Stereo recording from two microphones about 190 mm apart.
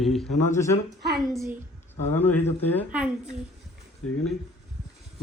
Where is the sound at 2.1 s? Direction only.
10° left (ahead or behind).